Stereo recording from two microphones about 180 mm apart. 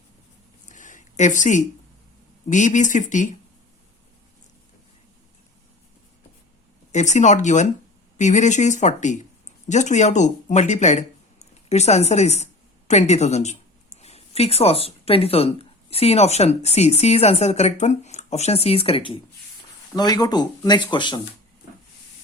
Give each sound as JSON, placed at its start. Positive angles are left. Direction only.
{"t": 0.7, "sound": "a sound", "side_deg": 45}
{"t": 2.5, "sound": "speech", "side_deg": 40}
{"t": 6.9, "sound": "speech", "side_deg": 40}